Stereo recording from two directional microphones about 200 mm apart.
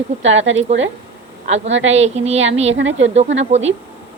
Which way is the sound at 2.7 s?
65° right (ahead or behind).